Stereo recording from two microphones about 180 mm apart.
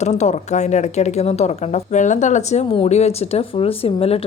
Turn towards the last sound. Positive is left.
turn(degrees=35)  # may be behind; listen again after turning